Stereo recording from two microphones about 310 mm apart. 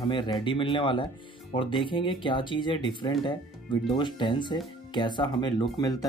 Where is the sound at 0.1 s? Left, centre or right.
Centre.